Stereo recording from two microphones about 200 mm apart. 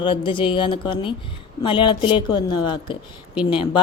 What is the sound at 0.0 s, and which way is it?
Speech, 25° left (ahead or behind).